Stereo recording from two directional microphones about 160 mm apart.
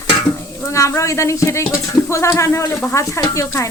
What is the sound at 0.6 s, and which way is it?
Speech, 20° left (ahead or behind).